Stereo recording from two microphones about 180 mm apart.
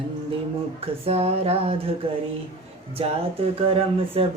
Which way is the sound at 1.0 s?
35° right (ahead or behind).